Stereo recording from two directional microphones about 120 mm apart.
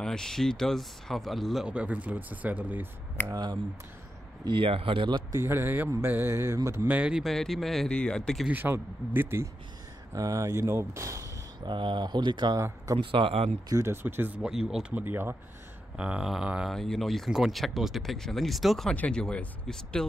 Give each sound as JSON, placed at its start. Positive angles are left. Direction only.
{"t": 0.0, "sound": "speech", "side_deg": 5}
{"t": 3.2, "sound": "speech", "side_deg": 15}
{"t": 4.5, "sound": "speech", "side_deg": -50}
{"t": 5.3, "sound": "speech", "side_deg": -25}
{"t": 6.9, "sound": "speech", "side_deg": -10}
{"t": 8.5, "sound": "speech", "side_deg": -15}
{"t": 11.6, "sound": "speech", "side_deg": -40}
{"t": 12.5, "sound": "speech", "side_deg": -25}
{"t": 13.0, "sound": "speech", "side_deg": -45}
{"t": 13.7, "sound": "speech", "side_deg": -25}
{"t": 14.0, "sound": "speech", "side_deg": -15}